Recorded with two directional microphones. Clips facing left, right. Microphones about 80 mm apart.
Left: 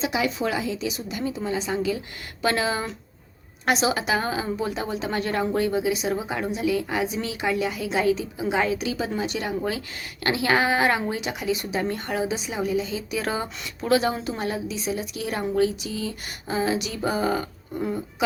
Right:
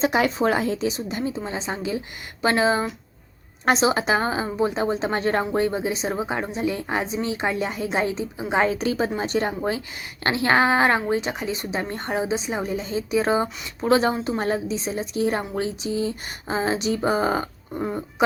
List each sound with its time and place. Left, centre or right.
0.0 s a woman's voice: right